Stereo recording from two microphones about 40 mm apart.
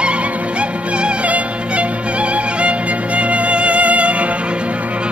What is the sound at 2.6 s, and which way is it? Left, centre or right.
Music, right.